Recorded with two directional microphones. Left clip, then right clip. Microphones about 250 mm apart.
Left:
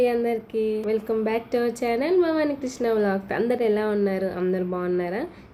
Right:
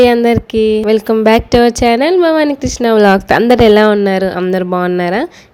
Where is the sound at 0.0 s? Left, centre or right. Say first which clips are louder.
Right 13 dB; right.